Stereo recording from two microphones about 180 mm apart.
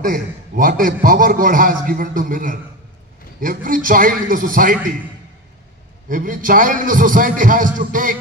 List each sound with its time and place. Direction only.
0.0 s a man's voice: 50° right (ahead or behind)
6.0 s a man's voice: 45° right (ahead or behind)